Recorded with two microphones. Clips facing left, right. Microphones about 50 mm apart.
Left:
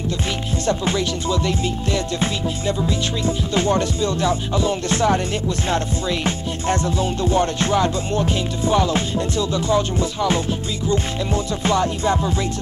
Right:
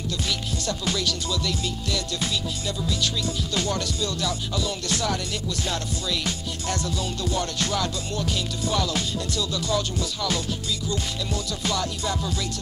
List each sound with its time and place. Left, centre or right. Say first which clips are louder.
0.7 s music: left 7 dB; left
11.6 s music: left 9 dB; left